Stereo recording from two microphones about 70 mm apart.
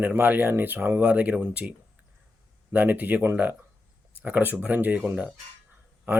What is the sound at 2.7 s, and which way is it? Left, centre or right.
A man's voice, right.